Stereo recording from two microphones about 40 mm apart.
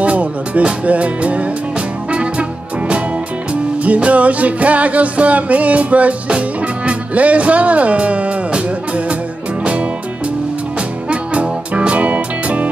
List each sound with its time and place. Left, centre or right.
0.0 s music: right
3.8 s music: right
11.1 s music: right